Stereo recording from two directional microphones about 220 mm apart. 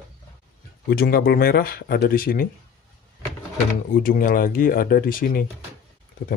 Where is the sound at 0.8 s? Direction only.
45° left (ahead or behind).